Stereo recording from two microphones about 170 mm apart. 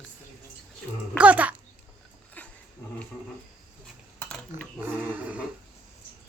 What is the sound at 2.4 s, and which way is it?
Dog, 10° left (ahead or behind).